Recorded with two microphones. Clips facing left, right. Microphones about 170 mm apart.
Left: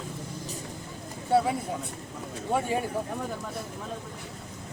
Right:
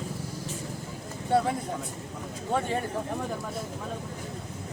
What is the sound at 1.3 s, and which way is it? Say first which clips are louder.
Speech: left 1 dB; 5° left (ahead or behind).